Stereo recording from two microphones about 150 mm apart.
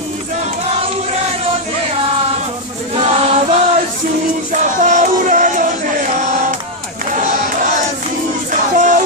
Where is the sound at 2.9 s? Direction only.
45° right (ahead or behind).